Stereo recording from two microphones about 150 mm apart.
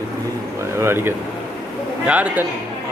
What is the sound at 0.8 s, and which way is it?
Speech, 15° right (ahead or behind).